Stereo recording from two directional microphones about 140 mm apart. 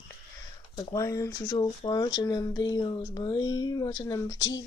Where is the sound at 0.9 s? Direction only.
25° left (ahead or behind).